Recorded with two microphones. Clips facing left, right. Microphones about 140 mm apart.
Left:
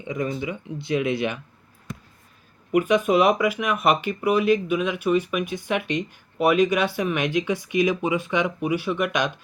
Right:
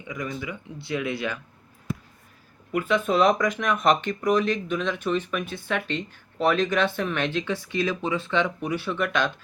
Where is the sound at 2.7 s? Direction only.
15° left (ahead or behind).